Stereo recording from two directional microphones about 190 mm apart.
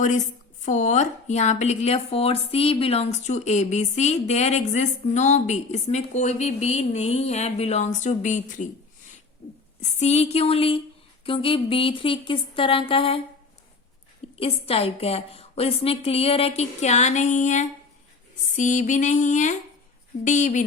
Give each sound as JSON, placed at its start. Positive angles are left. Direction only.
{"t": 0.0, "sound": "a woman's voice", "side_deg": 40}
{"t": 9.8, "sound": "a woman's voice", "side_deg": 35}
{"t": 14.3, "sound": "a woman's voice", "side_deg": 30}